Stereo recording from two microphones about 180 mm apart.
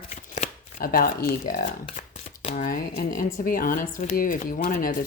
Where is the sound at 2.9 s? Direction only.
55° left (ahead or behind).